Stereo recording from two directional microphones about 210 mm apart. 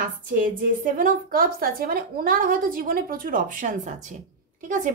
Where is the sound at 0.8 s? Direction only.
40° right (ahead or behind).